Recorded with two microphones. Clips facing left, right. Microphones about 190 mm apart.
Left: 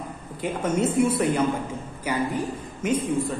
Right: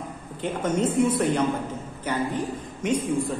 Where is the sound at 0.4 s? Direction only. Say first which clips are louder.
Even; 10° left (ahead or behind).